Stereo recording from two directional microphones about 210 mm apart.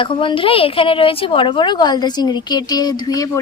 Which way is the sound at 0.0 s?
25° left (ahead or behind).